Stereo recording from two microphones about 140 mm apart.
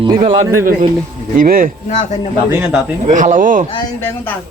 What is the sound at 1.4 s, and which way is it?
Speech, 90° right.